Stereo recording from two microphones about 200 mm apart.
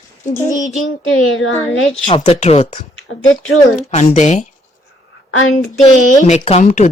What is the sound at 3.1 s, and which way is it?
Speech, 75° left (ahead or behind).